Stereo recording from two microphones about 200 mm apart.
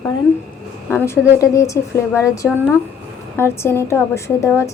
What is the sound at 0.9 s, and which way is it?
A woman's voice, 10° left (ahead or behind).